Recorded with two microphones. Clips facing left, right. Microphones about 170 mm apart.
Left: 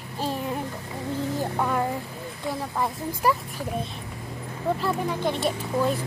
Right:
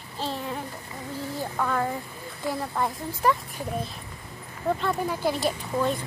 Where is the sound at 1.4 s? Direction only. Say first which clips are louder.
Right 1 dB; 15° left (ahead or behind).